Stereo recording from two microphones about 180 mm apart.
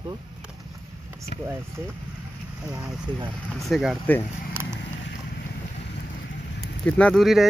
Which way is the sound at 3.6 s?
Centre (ahead or behind).